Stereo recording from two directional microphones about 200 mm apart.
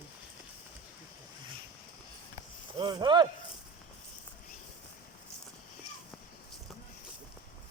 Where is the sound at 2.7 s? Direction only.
25° right (ahead or behind).